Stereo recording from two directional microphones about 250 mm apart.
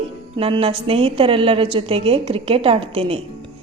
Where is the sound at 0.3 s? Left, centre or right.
Right.